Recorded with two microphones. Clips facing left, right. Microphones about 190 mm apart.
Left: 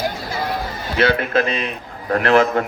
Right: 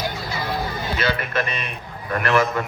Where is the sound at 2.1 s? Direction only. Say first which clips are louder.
Left 5 dB; 60° left (ahead or behind).